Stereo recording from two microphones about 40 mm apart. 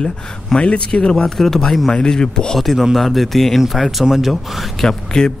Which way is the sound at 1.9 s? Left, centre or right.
Centre.